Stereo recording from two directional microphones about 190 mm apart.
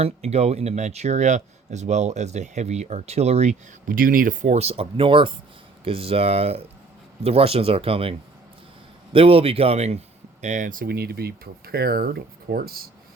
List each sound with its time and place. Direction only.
0.0 s speech: 35° right (ahead or behind)
9.1 s speech: 30° right (ahead or behind); by 12.9 s 50° right (ahead or behind)